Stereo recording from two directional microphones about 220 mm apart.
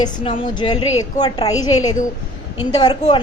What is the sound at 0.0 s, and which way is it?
A woman's voice, 20° left (ahead or behind).